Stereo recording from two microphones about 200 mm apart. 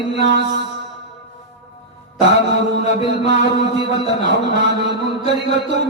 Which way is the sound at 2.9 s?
60° right (ahead or behind).